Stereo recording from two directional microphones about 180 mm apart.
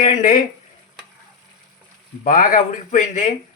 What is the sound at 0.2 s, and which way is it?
Speech, 45° left (ahead or behind).